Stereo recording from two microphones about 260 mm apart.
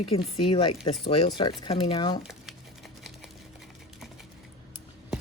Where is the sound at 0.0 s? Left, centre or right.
Left.